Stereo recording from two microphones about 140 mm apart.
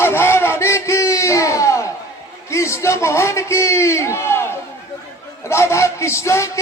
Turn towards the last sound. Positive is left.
turn(degrees=20)  # may be behind; listen again after turning